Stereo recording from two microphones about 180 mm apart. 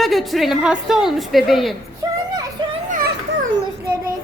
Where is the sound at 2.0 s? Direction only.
20° right (ahead or behind).